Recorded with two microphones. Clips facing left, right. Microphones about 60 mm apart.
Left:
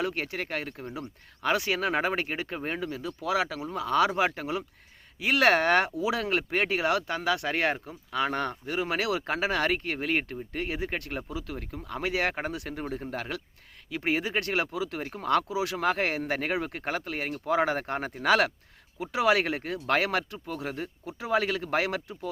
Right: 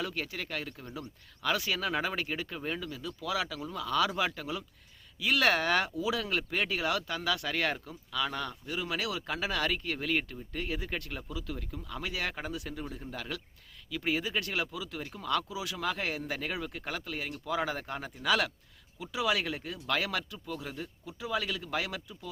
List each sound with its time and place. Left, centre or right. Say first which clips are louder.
0.0 s speech: left 5 dB; left